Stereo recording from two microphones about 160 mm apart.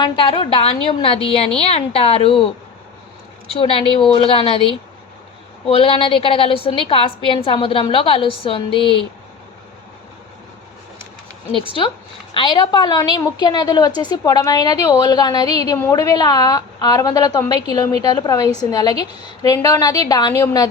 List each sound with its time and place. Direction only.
0.0 s a woman's voice: 30° left (ahead or behind)
3.5 s a woman's voice: 35° left (ahead or behind)
12.3 s a woman's voice: 30° left (ahead or behind)